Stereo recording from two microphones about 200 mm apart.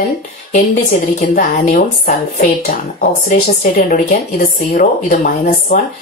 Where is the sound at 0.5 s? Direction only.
35° left (ahead or behind).